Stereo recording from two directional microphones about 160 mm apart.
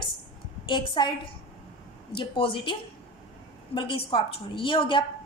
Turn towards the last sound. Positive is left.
turn(degrees=30)  # may be behind; listen again after turning